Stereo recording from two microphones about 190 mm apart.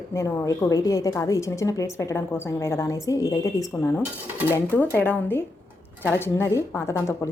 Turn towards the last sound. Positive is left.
turn(degrees=15)  # may be behind; listen again after turning